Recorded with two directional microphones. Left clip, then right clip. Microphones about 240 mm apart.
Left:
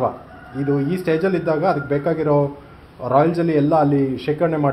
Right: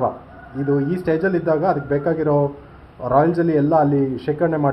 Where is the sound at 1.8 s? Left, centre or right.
Left.